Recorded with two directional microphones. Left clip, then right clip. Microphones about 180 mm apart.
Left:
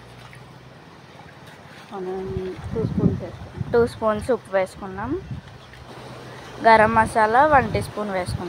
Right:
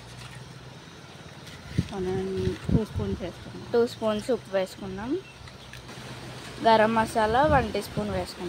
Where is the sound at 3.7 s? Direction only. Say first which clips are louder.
Left 5 dB; 5° left (ahead or behind).